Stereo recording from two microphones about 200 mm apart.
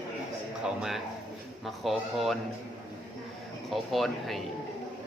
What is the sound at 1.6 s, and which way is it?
Speech, centre (ahead or behind).